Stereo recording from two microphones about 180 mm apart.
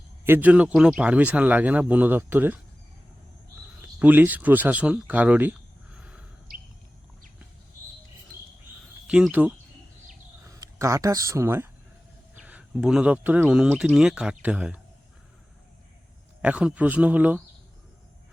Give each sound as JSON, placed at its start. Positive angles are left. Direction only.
{"t": 0.3, "sound": "a man's voice", "side_deg": -10}
{"t": 3.8, "sound": "speech", "side_deg": -10}
{"t": 9.0, "sound": "speech", "side_deg": -5}
{"t": 10.4, "sound": "a man's voice", "side_deg": -15}
{"t": 16.4, "sound": "a man's voice", "side_deg": -5}